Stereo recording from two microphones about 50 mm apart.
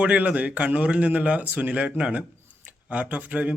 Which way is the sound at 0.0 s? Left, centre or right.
Right.